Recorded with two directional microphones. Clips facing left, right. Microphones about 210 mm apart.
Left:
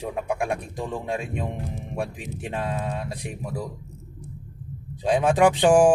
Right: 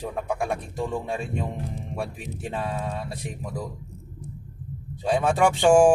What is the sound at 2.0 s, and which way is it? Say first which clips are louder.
Speech: left 3 dB; 15° left (ahead or behind).